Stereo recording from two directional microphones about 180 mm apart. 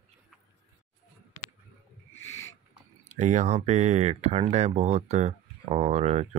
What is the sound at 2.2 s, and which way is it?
Owl, 90° left.